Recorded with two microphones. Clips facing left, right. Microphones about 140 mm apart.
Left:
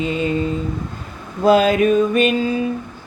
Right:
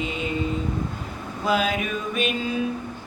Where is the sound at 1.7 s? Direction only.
10° right (ahead or behind).